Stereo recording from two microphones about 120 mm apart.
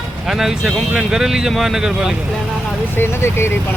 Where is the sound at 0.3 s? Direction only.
5° right (ahead or behind).